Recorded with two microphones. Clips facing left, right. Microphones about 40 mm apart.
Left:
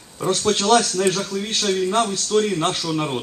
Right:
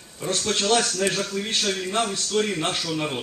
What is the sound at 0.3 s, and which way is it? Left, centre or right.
Speech, centre.